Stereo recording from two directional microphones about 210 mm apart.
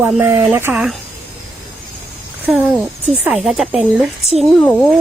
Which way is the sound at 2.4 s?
5° right (ahead or behind).